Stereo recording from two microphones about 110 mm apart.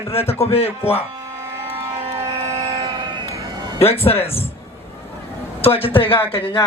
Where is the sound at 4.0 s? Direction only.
60° left (ahead or behind).